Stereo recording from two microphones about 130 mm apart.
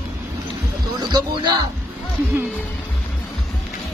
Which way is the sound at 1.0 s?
35° right (ahead or behind).